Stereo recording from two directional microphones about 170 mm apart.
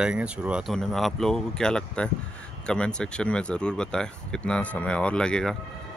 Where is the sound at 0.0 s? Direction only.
5° right (ahead or behind).